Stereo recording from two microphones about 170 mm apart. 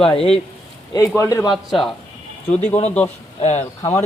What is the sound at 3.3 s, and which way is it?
Speech, 40° left (ahead or behind).